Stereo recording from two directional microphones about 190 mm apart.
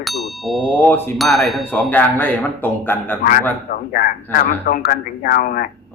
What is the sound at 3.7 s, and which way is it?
Speech, 45° left (ahead or behind).